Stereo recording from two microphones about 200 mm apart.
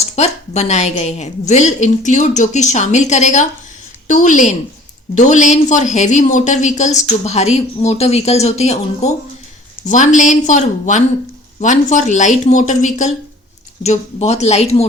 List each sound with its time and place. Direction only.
0.0 s a woman's voice: 35° left (ahead or behind)